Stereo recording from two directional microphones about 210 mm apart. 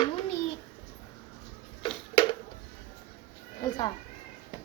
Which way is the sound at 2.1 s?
20° left (ahead or behind).